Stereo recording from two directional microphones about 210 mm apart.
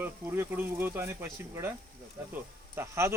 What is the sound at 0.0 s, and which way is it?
Speech, 10° right (ahead or behind).